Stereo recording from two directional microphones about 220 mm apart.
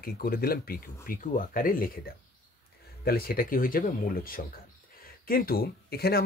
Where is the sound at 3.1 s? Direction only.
45° left (ahead or behind).